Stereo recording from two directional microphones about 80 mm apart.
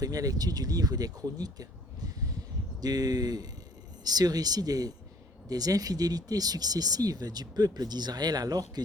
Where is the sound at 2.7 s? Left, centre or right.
Right.